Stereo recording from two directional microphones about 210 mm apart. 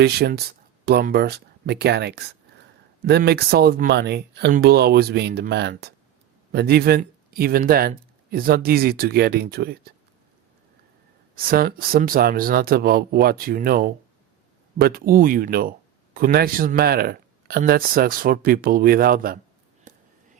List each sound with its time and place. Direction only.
0.0 s speech: 50° right (ahead or behind)
11.3 s speech: 45° right (ahead or behind)
19.9 s a sound: 40° right (ahead or behind)